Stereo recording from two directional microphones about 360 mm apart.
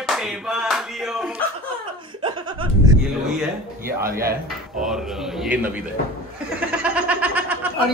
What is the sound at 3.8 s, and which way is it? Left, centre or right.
Speech, right.